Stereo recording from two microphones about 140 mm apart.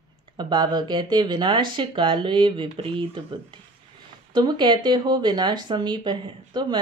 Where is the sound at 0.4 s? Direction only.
30° right (ahead or behind).